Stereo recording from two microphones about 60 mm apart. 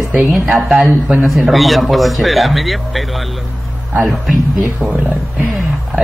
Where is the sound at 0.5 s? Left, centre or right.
Centre.